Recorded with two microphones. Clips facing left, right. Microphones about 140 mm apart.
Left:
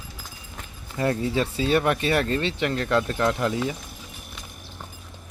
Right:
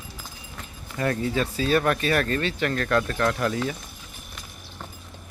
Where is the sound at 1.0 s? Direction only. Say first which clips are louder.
Left 1 dB; 25° left (ahead or behind).